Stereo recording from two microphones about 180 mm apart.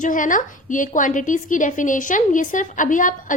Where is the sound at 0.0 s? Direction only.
45° left (ahead or behind).